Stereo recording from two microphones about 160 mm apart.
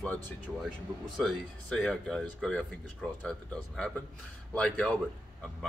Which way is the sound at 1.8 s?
5° left (ahead or behind).